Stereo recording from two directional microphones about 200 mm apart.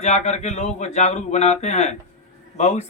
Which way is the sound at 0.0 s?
35° left (ahead or behind).